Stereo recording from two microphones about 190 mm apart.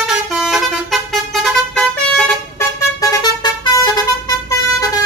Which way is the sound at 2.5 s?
15° left (ahead or behind).